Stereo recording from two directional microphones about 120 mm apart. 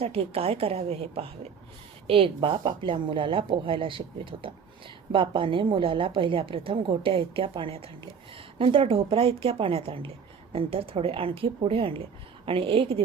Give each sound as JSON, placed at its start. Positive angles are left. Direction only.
{"t": 0.0, "sound": "a woman's voice", "side_deg": -55}